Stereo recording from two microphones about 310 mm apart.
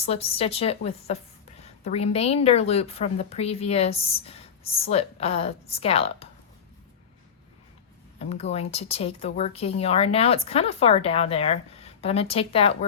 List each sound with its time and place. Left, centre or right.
0.0 s a woman's voice: centre
8.2 s a woman's voice: centre